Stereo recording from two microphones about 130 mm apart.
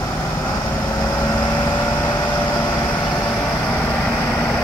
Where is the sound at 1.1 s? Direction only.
15° left (ahead or behind).